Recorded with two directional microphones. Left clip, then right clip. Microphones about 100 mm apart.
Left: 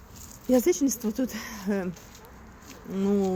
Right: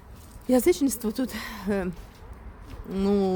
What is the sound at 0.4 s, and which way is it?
Speech, 25° right (ahead or behind).